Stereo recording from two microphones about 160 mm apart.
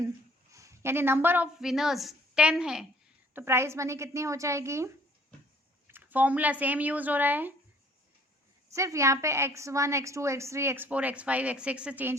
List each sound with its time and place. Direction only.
0.5 s speech: 20° right (ahead or behind)
1.6 s a woman's voice: centre (ahead or behind)
3.3 s a woman's voice: 15° right (ahead or behind)
5.9 s a woman's voice: 10° right (ahead or behind)
8.7 s a woman's voice: 20° right (ahead or behind)